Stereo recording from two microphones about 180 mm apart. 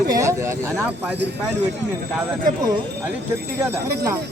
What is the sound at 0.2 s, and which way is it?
Speech, 15° right (ahead or behind).